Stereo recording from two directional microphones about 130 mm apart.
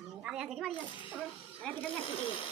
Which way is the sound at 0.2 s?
5° right (ahead or behind).